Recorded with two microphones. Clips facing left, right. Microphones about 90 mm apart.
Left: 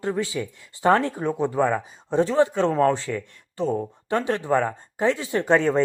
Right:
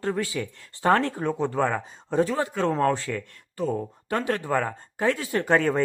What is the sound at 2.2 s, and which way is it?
Speech, 25° left (ahead or behind).